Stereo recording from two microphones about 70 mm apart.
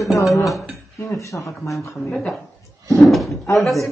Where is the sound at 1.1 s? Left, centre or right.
Left.